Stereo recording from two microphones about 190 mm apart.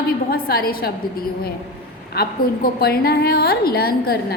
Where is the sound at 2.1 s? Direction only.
55° left (ahead or behind).